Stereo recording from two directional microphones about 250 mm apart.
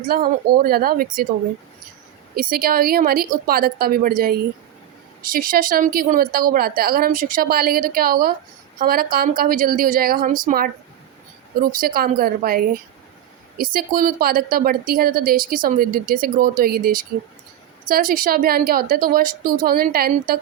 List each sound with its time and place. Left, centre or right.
0.0 s a woman's voice: right
2.3 s a woman's voice: right